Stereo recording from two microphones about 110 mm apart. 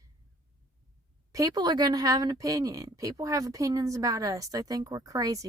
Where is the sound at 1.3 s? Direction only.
35° right (ahead or behind).